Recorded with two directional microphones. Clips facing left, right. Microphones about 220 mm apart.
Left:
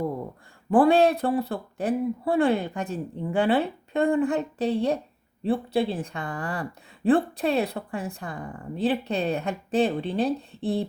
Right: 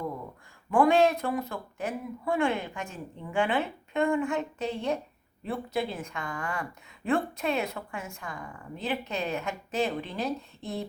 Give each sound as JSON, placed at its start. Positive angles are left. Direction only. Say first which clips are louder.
{"t": 0.7, "sound": "a woman's voice", "louder": "left 4 dB", "side_deg": 35}